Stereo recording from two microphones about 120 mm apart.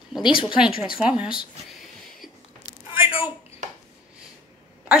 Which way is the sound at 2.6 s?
45° left (ahead or behind).